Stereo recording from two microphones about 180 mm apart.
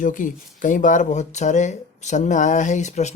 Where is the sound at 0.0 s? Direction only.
45° left (ahead or behind).